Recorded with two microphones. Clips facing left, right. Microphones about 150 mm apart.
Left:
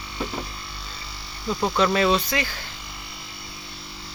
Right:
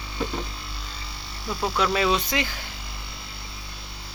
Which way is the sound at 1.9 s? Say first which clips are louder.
Left 1 dB; 5° right (ahead or behind).